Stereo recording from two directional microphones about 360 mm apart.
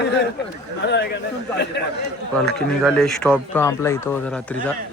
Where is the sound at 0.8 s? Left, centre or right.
Left.